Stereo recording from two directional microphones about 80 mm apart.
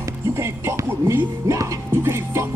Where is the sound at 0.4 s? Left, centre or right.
Right.